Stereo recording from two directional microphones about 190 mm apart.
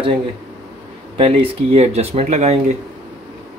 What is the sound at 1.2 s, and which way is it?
Speech, 35° right (ahead or behind).